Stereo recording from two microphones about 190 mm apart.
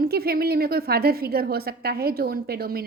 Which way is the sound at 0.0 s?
55° right (ahead or behind).